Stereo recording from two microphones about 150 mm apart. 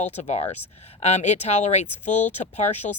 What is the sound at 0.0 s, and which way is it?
Speech, 50° left (ahead or behind).